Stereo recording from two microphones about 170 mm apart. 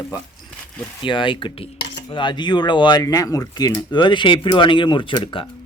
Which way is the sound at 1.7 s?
90° left.